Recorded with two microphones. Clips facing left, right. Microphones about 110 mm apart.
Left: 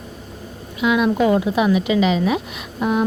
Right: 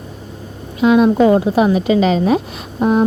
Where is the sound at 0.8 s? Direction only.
35° right (ahead or behind).